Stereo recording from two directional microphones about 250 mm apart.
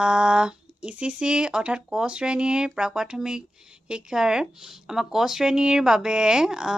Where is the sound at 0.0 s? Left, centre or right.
Centre.